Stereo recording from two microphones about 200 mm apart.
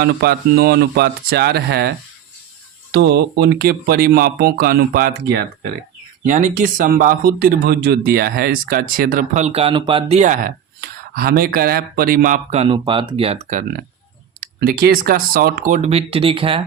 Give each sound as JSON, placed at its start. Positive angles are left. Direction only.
{"t": 0.0, "sound": "speech", "side_deg": -50}
{"t": 2.9, "sound": "speech", "side_deg": -55}
{"t": 14.6, "sound": "speech", "side_deg": -50}